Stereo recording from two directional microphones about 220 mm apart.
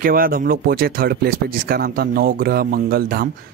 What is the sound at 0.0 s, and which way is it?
Speech, 40° right (ahead or behind).